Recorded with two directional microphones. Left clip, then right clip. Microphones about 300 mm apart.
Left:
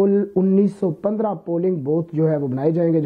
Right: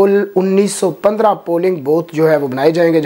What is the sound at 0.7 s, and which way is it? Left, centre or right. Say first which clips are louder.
Speech: right 9 dB; centre.